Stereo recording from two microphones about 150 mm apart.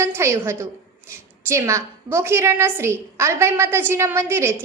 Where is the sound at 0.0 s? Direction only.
15° right (ahead or behind).